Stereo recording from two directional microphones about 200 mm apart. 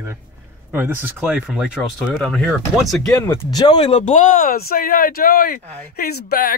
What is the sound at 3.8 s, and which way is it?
Speech, 35° left (ahead or behind).